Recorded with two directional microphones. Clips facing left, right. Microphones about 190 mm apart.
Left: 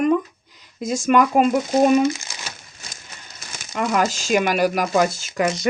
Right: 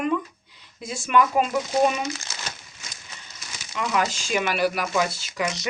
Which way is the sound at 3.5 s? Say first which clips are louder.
Left 4 dB; 50° left (ahead or behind).